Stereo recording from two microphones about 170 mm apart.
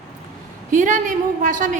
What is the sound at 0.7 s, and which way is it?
A woman's voice, 50° right (ahead or behind).